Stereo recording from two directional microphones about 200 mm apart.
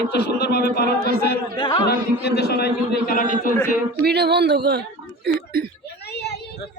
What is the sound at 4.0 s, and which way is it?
Speech, 55° right (ahead or behind).